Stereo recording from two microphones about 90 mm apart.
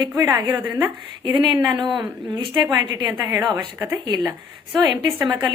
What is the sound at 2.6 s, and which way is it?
Speech, 50° right (ahead or behind).